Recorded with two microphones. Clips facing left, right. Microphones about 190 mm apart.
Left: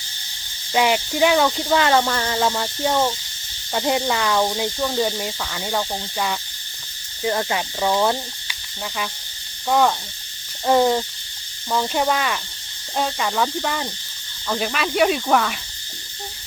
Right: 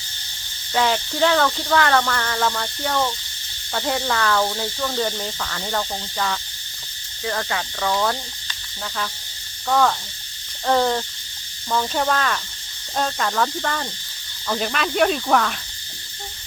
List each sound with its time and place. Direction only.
0.7 s speech: 15° left (ahead or behind)
9.6 s speech: 15° left (ahead or behind)